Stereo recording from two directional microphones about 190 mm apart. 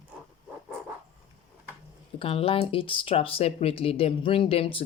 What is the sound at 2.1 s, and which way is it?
Speech, 30° left (ahead or behind).